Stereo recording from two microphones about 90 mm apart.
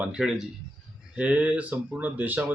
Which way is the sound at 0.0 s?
10° right (ahead or behind).